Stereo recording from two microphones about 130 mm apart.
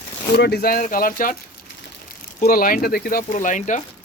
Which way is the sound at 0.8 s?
90° left.